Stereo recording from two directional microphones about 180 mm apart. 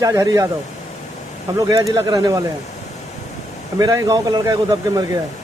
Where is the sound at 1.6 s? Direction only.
20° right (ahead or behind).